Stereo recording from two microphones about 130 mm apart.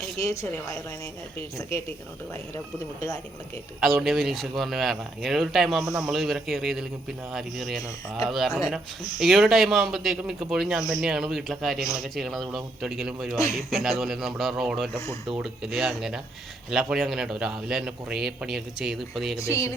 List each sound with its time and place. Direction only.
0.2 s speech: 25° left (ahead or behind)
3.8 s speech: centre (ahead or behind)
19.4 s speech: 20° left (ahead or behind)